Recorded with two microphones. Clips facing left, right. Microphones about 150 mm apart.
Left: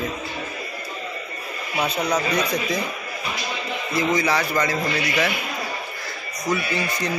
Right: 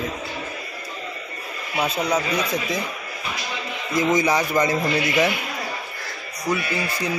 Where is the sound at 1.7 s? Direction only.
5° right (ahead or behind).